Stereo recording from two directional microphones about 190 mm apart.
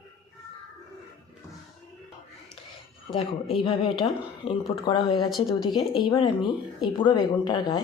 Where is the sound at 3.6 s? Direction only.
25° left (ahead or behind).